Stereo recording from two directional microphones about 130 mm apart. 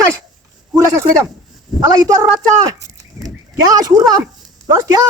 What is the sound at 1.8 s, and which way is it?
Speech, 30° right (ahead or behind).